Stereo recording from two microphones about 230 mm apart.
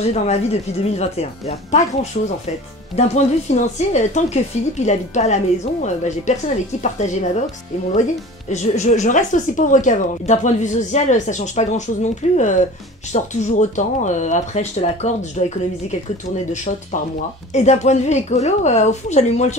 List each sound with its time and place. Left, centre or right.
0.0 s a woman's voice: left
3.0 s speech: left
8.5 s speech: left
17.5 s a woman's voice: left